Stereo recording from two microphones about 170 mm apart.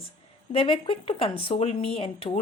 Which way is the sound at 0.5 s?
30° left (ahead or behind).